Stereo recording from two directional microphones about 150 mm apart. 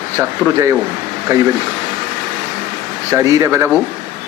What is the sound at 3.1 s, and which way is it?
Speech, 20° right (ahead or behind).